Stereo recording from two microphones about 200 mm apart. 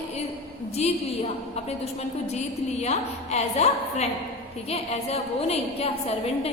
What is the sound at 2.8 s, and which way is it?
A woman's voice, 35° left (ahead or behind).